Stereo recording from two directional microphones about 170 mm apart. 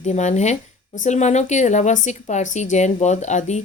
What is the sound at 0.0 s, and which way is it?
A woman's voice, 45° left (ahead or behind).